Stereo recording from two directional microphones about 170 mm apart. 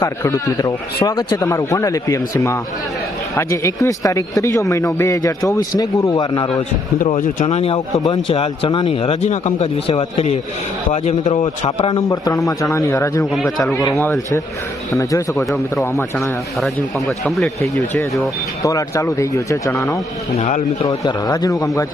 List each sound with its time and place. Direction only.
0.0 s a man's voice: 15° left (ahead or behind)
7.0 s speech: 50° left (ahead or behind)
12.0 s a man's voice: 20° left (ahead or behind)
16.6 s speech: centre (ahead or behind)
18.6 s a man's voice: 20° left (ahead or behind)
20.8 s a man's voice: 25° left (ahead or behind)